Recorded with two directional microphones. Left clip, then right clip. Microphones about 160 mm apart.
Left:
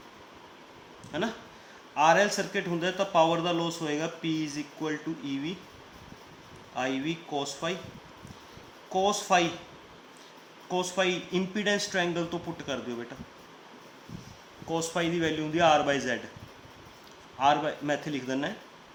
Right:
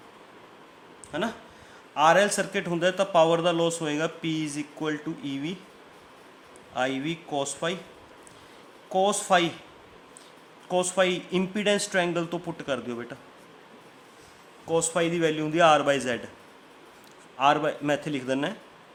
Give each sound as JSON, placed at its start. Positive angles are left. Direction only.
{"t": 1.1, "sound": "a man's voice", "side_deg": -35}
{"t": 6.7, "sound": "a man's voice", "side_deg": -45}
{"t": 8.9, "sound": "speech", "side_deg": -40}
{"t": 10.7, "sound": "speech", "side_deg": -40}
{"t": 14.7, "sound": "speech", "side_deg": -35}
{"t": 17.3, "sound": "a man's voice", "side_deg": -45}